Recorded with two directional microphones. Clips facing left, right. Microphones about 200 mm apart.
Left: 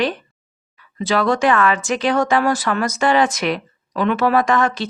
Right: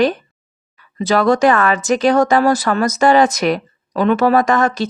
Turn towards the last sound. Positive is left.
turn(degrees=-40)  # may be behind; listen again after turning